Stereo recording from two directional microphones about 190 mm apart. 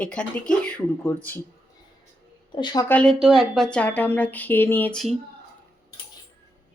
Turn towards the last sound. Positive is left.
turn(degrees=5)  # may be behind; listen again after turning